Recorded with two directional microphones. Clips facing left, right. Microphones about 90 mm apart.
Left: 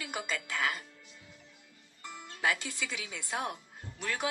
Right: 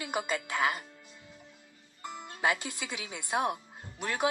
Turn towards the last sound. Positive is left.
turn(degrees=-25)  # may be behind; listen again after turning